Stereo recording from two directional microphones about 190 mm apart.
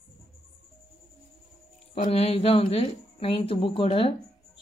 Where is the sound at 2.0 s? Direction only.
30° left (ahead or behind).